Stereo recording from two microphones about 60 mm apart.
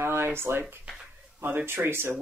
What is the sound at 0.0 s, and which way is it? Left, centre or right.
Speech, right.